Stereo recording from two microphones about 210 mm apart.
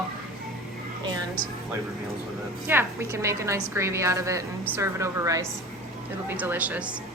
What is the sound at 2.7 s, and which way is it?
A woman's voice, 10° right (ahead or behind).